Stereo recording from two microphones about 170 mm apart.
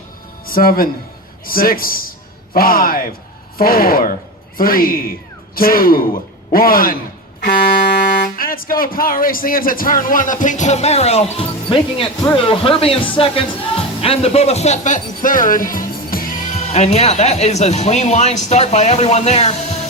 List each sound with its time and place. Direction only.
0.4 s a man's voice: 60° left (ahead or behind); by 19.8 s 40° left (ahead or behind)